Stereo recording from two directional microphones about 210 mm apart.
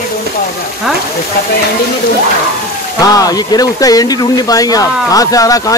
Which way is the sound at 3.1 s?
20° left (ahead or behind).